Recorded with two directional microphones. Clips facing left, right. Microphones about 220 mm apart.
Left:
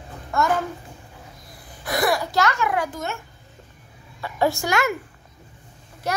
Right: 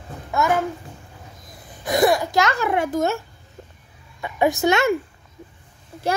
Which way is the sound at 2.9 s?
40° right (ahead or behind).